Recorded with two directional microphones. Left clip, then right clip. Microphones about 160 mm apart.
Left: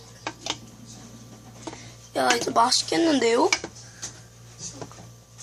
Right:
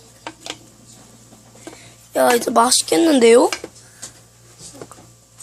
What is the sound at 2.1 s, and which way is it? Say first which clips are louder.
Speech: right 7 dB; 55° right (ahead or behind).